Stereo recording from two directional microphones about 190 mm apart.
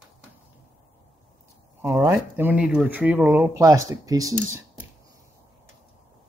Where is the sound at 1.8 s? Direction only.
15° right (ahead or behind).